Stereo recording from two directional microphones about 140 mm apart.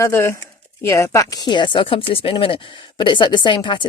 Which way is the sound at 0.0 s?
20° left (ahead or behind).